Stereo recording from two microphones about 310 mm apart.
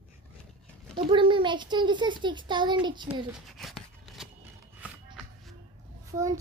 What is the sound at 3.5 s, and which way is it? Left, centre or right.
Scissors, centre.